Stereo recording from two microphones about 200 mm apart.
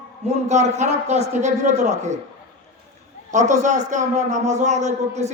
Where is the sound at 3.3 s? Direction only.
35° right (ahead or behind).